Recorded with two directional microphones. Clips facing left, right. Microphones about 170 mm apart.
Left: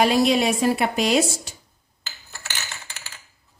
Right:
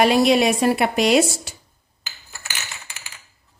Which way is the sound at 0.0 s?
65° right (ahead or behind).